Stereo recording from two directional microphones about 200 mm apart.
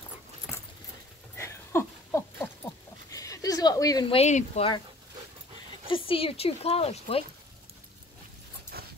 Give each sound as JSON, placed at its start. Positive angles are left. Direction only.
{"t": 1.3, "sound": "a sound", "side_deg": 15}
{"t": 3.1, "sound": "speech", "side_deg": 15}
{"t": 5.9, "sound": "speech", "side_deg": 25}
{"t": 8.7, "sound": "dog", "side_deg": -50}